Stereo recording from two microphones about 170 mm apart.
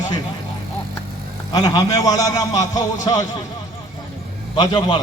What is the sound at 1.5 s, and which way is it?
A man's voice, 25° left (ahead or behind).